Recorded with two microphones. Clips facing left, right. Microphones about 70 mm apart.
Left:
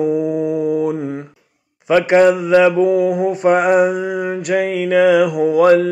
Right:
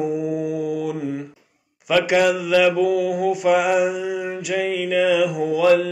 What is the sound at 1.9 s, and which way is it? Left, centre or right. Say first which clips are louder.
Mantra: left 6 dB; left.